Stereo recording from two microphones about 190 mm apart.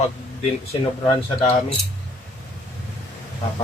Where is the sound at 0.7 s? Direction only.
30° left (ahead or behind).